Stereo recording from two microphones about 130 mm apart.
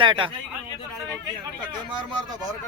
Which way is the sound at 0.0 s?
40° right (ahead or behind).